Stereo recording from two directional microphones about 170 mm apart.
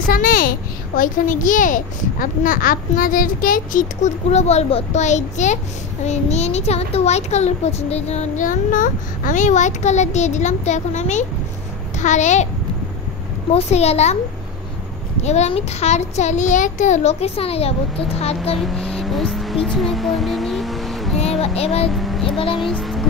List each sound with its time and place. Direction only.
0.0 s a child's voice: 55° left (ahead or behind)
13.5 s a child's voice: 40° left (ahead or behind)
15.2 s a child's voice: 40° left (ahead or behind)
18.6 s speech: centre (ahead or behind)
21.2 s a child's voice: 35° left (ahead or behind)
21.9 s a child's voice: centre (ahead or behind)